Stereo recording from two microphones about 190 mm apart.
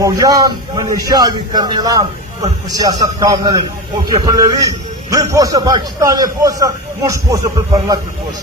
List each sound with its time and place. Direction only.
0.0 s a man's voice: 20° right (ahead or behind)